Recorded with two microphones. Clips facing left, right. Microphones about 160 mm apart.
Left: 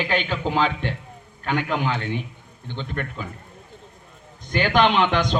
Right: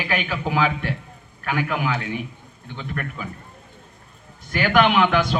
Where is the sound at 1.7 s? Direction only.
25° left (ahead or behind).